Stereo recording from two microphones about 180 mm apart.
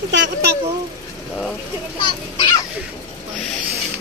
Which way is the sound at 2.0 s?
25° left (ahead or behind).